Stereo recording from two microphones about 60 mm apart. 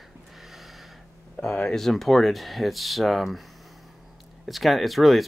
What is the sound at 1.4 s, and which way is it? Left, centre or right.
Speech, centre.